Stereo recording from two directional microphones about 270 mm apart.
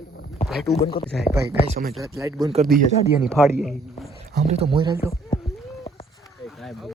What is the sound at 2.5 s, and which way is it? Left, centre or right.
Speech, right.